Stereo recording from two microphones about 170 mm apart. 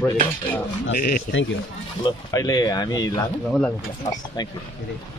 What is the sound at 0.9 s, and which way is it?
Speech, 55° left (ahead or behind).